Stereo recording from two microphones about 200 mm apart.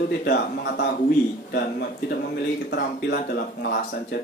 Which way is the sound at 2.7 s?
55° left (ahead or behind).